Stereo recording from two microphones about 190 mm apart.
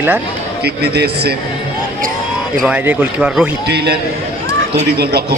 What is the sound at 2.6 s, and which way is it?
Speech, 5° right (ahead or behind).